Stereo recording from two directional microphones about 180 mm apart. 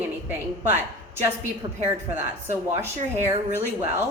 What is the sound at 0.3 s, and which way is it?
A woman's voice, 10° right (ahead or behind).